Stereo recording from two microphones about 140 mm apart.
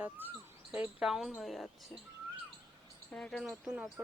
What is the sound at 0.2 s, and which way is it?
Speech, 15° right (ahead or behind).